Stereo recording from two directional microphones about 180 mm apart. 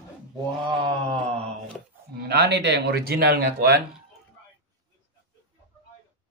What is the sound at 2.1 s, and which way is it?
Speech, 65° right (ahead or behind).